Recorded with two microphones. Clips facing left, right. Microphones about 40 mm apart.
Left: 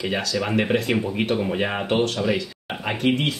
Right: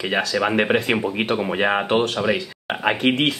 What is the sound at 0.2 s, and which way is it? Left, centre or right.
Speech, right.